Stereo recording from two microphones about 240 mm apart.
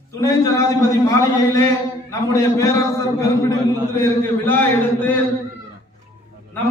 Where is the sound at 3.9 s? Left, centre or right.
Centre.